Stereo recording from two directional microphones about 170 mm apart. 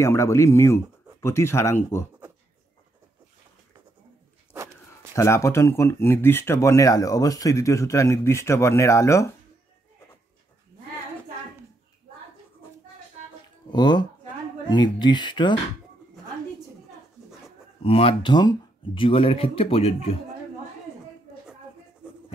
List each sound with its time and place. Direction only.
0.0 s speech: 15° left (ahead or behind)
5.1 s speech: 15° left (ahead or behind)
13.7 s speech: 25° left (ahead or behind)
17.8 s speech: 35° left (ahead or behind)